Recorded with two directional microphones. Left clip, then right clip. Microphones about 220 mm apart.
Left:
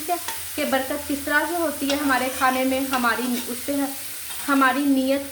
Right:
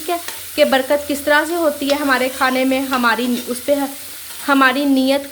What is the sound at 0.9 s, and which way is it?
Speech, 50° right (ahead or behind).